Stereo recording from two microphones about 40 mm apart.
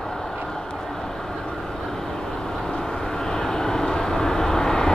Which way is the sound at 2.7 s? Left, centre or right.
Centre.